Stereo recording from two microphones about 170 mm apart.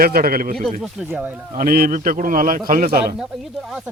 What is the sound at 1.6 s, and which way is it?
A man's voice, 55° right (ahead or behind).